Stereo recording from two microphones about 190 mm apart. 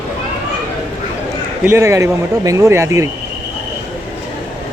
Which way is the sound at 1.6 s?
15° right (ahead or behind).